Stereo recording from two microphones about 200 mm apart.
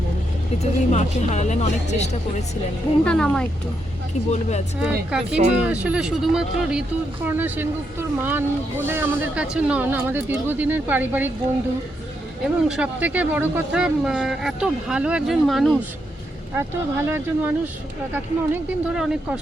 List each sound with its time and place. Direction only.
0.6 s speech: 35° left (ahead or behind)
3.0 s speech: 5° left (ahead or behind)
4.3 s speech: 35° left (ahead or behind)
4.8 s speech: 5° right (ahead or behind)
12.6 s speech: 5° right (ahead or behind)
16.6 s speech: 10° right (ahead or behind)